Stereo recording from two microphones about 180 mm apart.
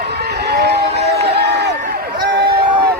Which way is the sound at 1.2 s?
70° right (ahead or behind).